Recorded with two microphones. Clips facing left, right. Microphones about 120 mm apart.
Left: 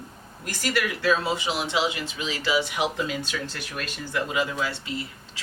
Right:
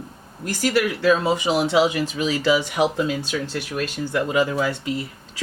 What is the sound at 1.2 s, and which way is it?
A woman's voice, 45° right (ahead or behind).